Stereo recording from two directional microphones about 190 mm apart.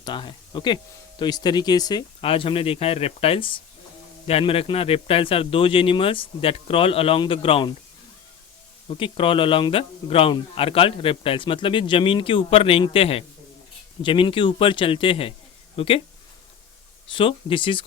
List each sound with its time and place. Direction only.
0.0 s speech: 25° left (ahead or behind)
8.9 s speech: 25° left (ahead or behind)
17.1 s speech: 25° left (ahead or behind)